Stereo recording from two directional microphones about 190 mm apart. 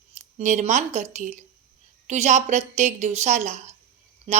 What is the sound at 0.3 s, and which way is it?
A woman's voice, 35° right (ahead or behind).